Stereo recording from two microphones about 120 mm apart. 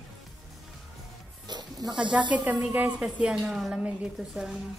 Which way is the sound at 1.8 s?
35° right (ahead or behind).